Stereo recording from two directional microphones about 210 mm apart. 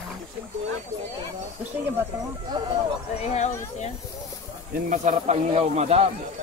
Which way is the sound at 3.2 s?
30° left (ahead or behind).